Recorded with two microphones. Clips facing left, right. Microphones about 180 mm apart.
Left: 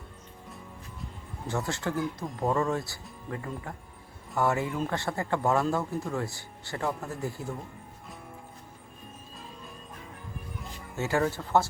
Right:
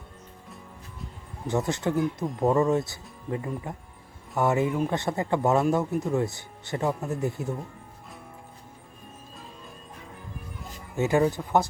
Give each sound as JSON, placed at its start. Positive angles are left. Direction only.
{"t": 1.5, "sound": "speech", "side_deg": -20}
{"t": 10.9, "sound": "speech", "side_deg": -15}